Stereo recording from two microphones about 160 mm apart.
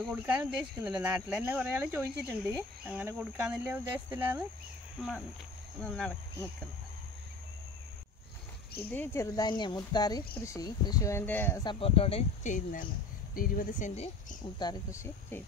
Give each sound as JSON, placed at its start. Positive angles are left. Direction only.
{"t": 0.1, "sound": "speech", "side_deg": -10}
{"t": 5.8, "sound": "speech", "side_deg": 5}
{"t": 8.9, "sound": "speech", "side_deg": 15}
{"t": 11.6, "sound": "speech", "side_deg": 35}
{"t": 14.6, "sound": "speech", "side_deg": 20}